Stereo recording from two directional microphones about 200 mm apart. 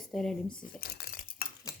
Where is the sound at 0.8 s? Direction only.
50° left (ahead or behind).